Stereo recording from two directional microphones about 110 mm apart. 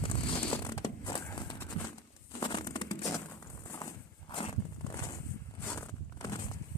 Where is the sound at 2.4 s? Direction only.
45° left (ahead or behind).